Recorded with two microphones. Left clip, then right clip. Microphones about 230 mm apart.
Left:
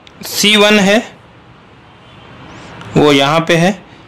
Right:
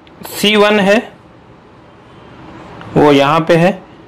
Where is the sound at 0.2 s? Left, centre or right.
Centre.